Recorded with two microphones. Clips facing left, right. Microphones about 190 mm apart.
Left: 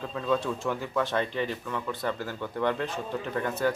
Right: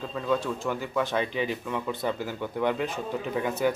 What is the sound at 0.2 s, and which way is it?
Speech, 5° right (ahead or behind).